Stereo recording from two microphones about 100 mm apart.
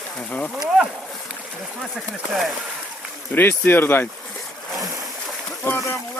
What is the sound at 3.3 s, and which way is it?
Speech, 20° left (ahead or behind).